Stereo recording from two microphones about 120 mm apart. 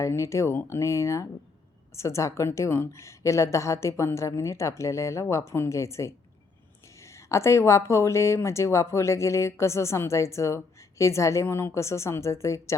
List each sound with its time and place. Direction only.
0.0 s speech: 25° left (ahead or behind)